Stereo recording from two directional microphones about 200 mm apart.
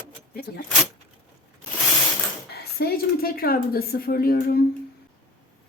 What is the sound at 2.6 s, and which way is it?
A woman's voice, 50° left (ahead or behind).